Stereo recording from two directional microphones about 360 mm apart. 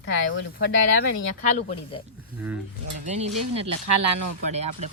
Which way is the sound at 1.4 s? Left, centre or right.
Centre.